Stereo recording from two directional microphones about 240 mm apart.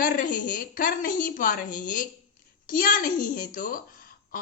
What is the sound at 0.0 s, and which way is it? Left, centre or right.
A woman's voice, left.